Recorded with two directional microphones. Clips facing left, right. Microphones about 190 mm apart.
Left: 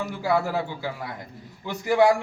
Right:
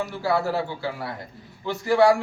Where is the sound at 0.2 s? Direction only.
15° left (ahead or behind).